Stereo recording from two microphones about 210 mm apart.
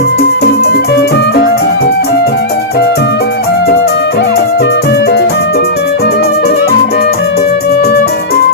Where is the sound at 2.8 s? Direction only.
55° left (ahead or behind).